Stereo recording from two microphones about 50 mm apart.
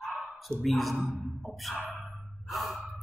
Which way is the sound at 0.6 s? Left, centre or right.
Centre.